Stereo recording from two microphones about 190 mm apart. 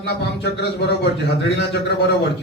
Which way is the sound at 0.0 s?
60° left (ahead or behind).